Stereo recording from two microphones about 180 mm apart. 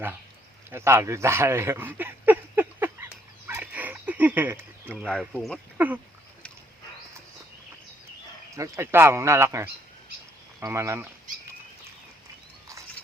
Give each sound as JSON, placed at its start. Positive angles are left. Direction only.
{"t": 0.7, "sound": "a sound", "side_deg": -15}
{"t": 5.2, "sound": "speech", "side_deg": 0}
{"t": 8.5, "sound": "speech", "side_deg": -15}